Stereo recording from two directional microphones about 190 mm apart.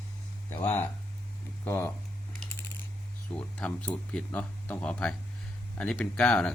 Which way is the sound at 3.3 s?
5° left (ahead or behind).